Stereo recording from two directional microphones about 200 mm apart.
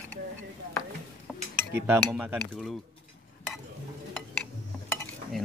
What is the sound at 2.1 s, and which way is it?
Cutlery, centre (ahead or behind).